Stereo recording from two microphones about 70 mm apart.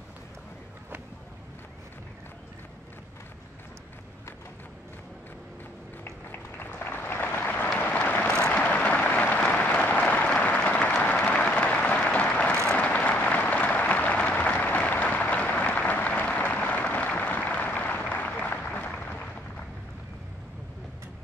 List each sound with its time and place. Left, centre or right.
6.3 s applause: left
7.8 s a sound: left
11.0 s applause: left